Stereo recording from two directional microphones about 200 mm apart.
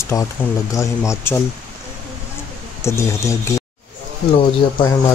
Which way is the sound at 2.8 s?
15° left (ahead or behind).